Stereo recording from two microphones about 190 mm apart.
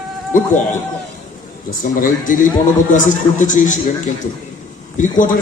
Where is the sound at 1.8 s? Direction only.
45° left (ahead or behind).